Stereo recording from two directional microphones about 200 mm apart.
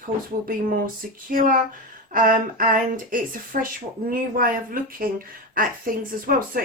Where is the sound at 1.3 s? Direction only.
45° right (ahead or behind).